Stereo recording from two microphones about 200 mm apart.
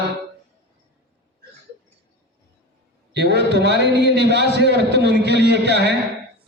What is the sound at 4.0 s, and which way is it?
A man's voice, 60° right (ahead or behind).